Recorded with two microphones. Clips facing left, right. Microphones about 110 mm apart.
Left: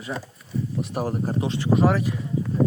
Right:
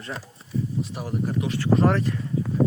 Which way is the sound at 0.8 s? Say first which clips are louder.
Left 2 dB; 50° left (ahead or behind).